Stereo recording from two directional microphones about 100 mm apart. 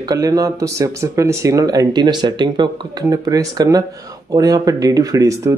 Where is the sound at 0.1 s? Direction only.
35° right (ahead or behind).